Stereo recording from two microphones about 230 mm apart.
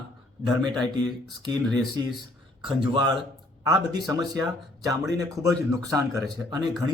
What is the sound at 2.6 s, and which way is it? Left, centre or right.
Speech, right.